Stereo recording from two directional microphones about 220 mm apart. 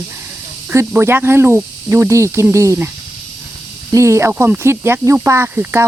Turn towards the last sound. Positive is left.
turn(degrees=-10)  # may be behind; listen again after turning